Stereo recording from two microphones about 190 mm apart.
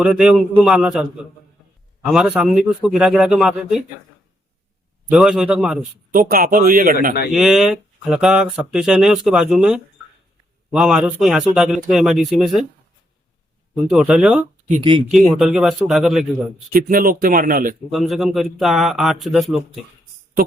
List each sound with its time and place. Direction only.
0.0 s speech: 5° right (ahead or behind)
2.0 s speech: centre (ahead or behind)
5.1 s speech: centre (ahead or behind)
6.1 s speech: 45° right (ahead or behind)
7.3 s speech: centre (ahead or behind)
13.8 s speech: 5° right (ahead or behind)
16.7 s speech: 50° right (ahead or behind)
17.9 s speech: centre (ahead or behind)